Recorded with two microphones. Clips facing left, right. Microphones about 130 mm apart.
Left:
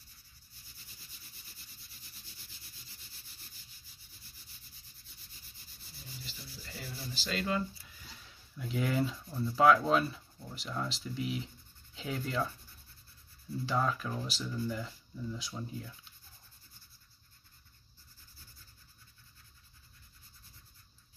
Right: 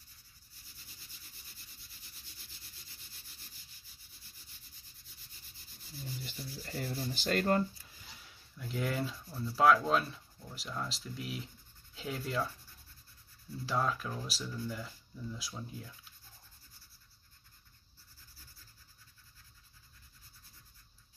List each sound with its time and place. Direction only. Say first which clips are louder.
6.2 s speech: right 5 dB; 55° right (ahead or behind)
8.5 s speech: left 3 dB; centre (ahead or behind)
11.9 s rub: left 1 dB; centre (ahead or behind)
13.7 s speech: left 1 dB; centre (ahead or behind)